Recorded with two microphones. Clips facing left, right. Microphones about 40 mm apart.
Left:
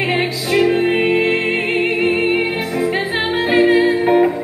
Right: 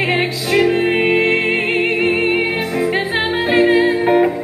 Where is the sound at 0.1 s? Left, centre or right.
Centre.